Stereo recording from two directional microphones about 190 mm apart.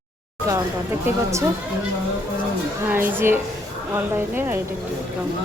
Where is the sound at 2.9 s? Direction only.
10° right (ahead or behind).